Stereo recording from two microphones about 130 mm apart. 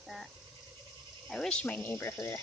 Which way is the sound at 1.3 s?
5° left (ahead or behind).